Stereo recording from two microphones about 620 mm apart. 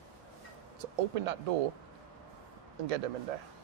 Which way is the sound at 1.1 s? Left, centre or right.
Right.